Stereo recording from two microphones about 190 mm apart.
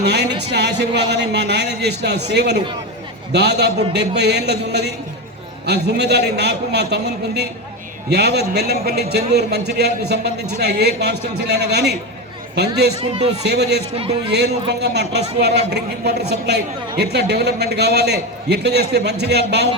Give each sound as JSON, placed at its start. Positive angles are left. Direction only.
{"t": 0.0, "sound": "a man's voice", "side_deg": -60}
{"t": 13.0, "sound": "speech", "side_deg": -30}
{"t": 13.4, "sound": "a man's voice", "side_deg": -60}